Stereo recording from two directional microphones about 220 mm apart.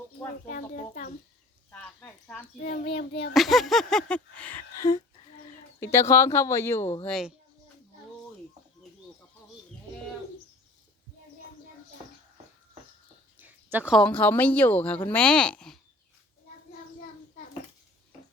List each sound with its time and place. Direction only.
0.4 s a child's voice: 35° left (ahead or behind)
1.7 s speech: 10° left (ahead or behind)
2.6 s a child's voice: 45° left (ahead or behind)
3.3 s speech: centre (ahead or behind)
7.0 s speech: centre (ahead or behind)
13.4 s speech: 10° right (ahead or behind)